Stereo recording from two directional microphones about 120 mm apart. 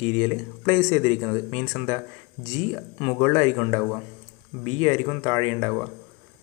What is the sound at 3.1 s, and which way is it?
Speech, 25° left (ahead or behind).